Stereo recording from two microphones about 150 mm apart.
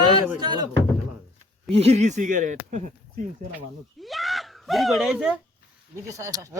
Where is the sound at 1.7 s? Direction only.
45° right (ahead or behind).